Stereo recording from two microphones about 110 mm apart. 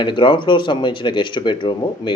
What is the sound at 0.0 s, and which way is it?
Speech, 50° left (ahead or behind).